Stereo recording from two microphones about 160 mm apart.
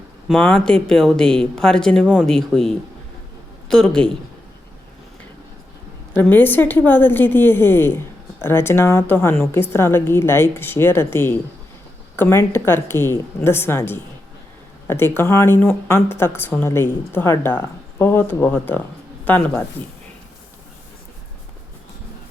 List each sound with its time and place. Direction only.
0.3 s speech: centre (ahead or behind)
6.1 s speech: 10° left (ahead or behind)